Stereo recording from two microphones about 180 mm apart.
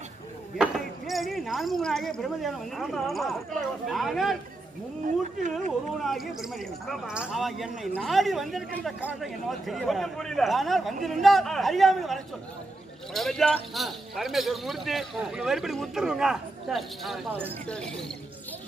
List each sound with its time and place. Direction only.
0.6 s speech: centre (ahead or behind)
5.0 s speech: 45° right (ahead or behind)
5.9 s speech: centre (ahead or behind)